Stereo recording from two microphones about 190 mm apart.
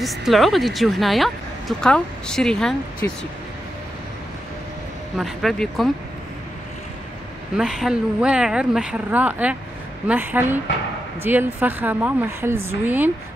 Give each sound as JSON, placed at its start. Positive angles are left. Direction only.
{"t": 0.0, "sound": "speech", "side_deg": 0}
{"t": 5.1, "sound": "speech", "side_deg": 0}
{"t": 7.5, "sound": "speech", "side_deg": -5}